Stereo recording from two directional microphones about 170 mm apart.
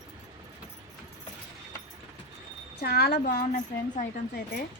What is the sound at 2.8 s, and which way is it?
Speech, 70° left (ahead or behind).